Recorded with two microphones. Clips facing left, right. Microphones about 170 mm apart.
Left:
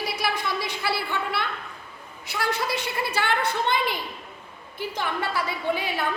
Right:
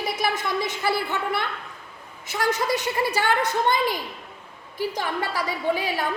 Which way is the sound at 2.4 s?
45° right (ahead or behind).